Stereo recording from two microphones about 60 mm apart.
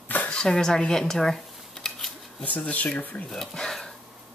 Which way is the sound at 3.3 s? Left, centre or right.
Centre.